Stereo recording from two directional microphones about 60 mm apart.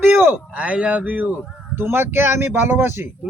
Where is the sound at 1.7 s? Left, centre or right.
Right.